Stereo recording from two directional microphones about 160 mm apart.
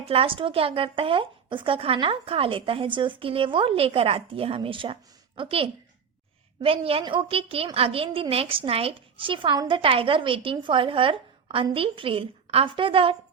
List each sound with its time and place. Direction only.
0.0 s a woman's voice: 35° right (ahead or behind)